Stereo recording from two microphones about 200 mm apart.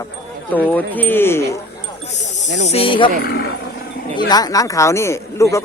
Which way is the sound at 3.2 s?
50° left (ahead or behind).